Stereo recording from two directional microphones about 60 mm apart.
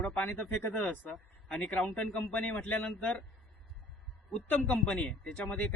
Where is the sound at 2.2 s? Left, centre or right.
Left.